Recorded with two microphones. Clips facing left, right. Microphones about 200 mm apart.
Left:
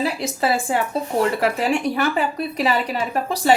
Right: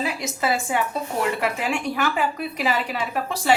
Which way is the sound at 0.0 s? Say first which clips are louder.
Left 4 dB; 35° left (ahead or behind).